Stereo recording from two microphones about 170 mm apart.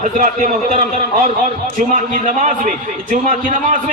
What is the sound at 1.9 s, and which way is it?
A man's voice, 50° right (ahead or behind).